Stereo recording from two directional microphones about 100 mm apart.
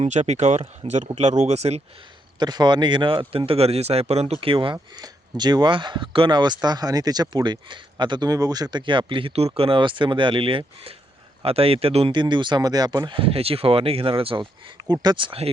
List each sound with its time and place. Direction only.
0.2 s speech: 70° right (ahead or behind); by 1.8 s 90° right
2.4 s speech: 45° right (ahead or behind); by 4.8 s 60° right (ahead or behind)
4.9 s speech: 45° right (ahead or behind); by 10.6 s 60° right (ahead or behind)
11.4 s speech: 75° right (ahead or behind)
12.1 s speech: 50° right (ahead or behind)
13.1 s speech: 70° right (ahead or behind)
15.0 s speech: 55° right (ahead or behind)